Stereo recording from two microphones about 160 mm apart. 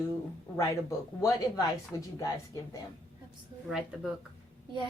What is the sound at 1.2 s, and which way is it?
Speech, 20° left (ahead or behind).